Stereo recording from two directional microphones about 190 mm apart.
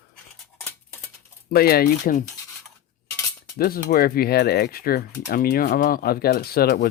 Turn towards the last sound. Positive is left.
turn(degrees=55)  # may be behind; listen again after turning